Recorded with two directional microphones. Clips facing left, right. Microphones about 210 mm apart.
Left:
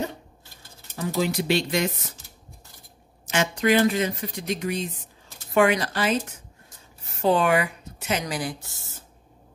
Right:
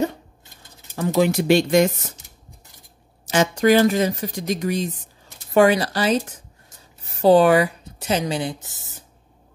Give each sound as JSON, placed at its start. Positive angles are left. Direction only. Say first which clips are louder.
{"t": 0.9, "sound": "speech", "louder": "right 6 dB", "side_deg": -55}
{"t": 3.3, "sound": "speech", "louder": "right 5 dB", "side_deg": -40}
{"t": 7.2, "sound": "speech", "louder": "right 7 dB", "side_deg": -35}